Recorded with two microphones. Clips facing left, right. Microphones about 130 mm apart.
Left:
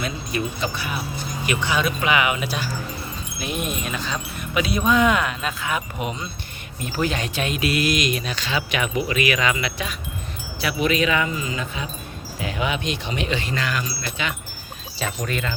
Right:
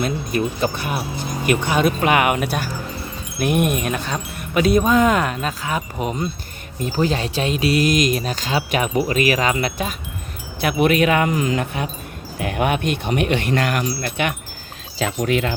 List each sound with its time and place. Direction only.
0.0 s speech: 50° right (ahead or behind)
11.3 s speech: 75° right (ahead or behind)
14.9 s speech: 85° right